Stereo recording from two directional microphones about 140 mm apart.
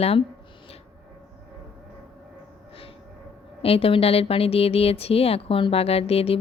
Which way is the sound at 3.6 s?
45° left (ahead or behind).